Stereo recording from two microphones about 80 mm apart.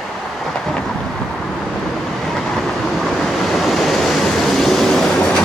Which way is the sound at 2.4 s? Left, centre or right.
Centre.